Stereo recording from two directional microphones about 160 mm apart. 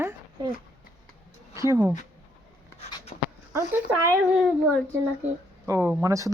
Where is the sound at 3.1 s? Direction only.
50° left (ahead or behind).